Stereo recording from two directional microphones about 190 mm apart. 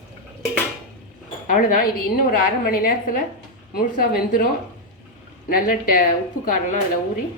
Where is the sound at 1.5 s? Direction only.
45° left (ahead or behind).